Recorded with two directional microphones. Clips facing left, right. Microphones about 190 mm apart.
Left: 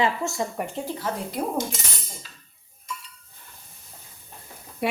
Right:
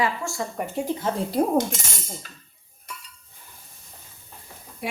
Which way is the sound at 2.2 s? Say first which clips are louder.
Right 4 dB; 55° right (ahead or behind).